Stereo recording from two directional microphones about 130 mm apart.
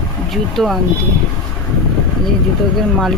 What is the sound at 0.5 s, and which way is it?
Speech, centre (ahead or behind).